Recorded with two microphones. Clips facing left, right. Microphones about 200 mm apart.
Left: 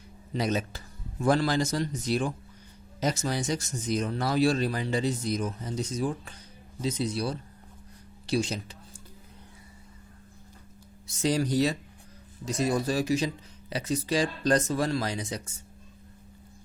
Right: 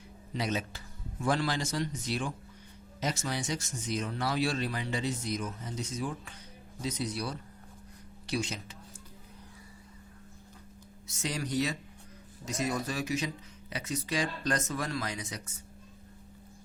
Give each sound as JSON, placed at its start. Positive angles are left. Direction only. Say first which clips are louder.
{"t": 0.3, "sound": "speech", "louder": "left 5 dB", "side_deg": 40}
{"t": 11.1, "sound": "speech", "louder": "left 7 dB", "side_deg": 35}